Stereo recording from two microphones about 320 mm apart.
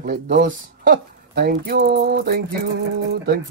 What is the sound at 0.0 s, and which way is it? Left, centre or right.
Speech, right.